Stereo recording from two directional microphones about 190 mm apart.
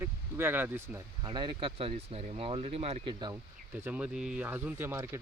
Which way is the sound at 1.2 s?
25° right (ahead or behind).